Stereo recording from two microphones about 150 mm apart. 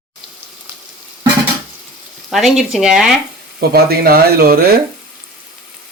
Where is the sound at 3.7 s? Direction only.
85° right.